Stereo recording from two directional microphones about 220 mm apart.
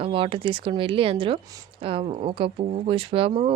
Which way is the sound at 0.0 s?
25° right (ahead or behind).